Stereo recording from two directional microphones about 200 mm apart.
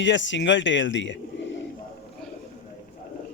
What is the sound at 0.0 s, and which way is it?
Speech, 65° left (ahead or behind).